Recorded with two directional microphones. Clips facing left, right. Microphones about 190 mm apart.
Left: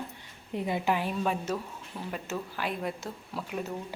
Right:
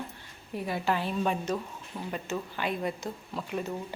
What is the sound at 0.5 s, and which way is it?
Speech, 20° left (ahead or behind).